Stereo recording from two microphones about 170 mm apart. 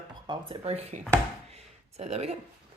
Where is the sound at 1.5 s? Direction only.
40° right (ahead or behind).